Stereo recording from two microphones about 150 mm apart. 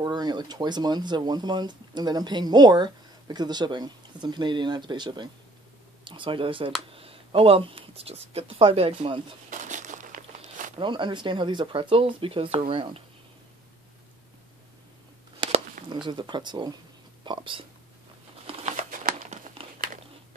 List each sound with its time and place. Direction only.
0.0 s speech: 30° right (ahead or behind)
9.5 s a sound: 55° right (ahead or behind)
10.8 s speech: 30° right (ahead or behind)
15.9 s speech: 30° right (ahead or behind)
18.5 s crumpling: 50° right (ahead or behind)